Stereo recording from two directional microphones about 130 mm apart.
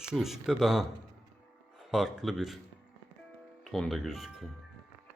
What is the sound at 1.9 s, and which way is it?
Speech, 5° right (ahead or behind).